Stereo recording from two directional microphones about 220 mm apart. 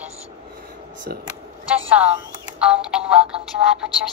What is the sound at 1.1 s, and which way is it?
Speech, 45° right (ahead or behind).